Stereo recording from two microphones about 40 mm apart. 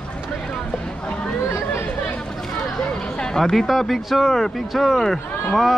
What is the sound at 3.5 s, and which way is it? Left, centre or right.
Speech, centre.